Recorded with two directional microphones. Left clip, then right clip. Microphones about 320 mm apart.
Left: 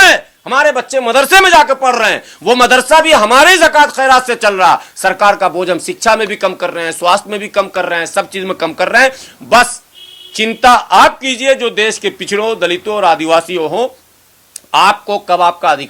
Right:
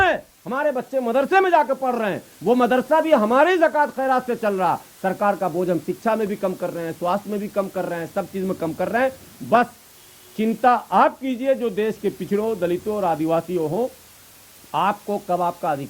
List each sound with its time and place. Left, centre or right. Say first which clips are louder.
0.0 s a man's voice: left 13 dB; centre
13.7 s speech: left 9 dB; left
14.7 s a man's voice: left 12 dB; centre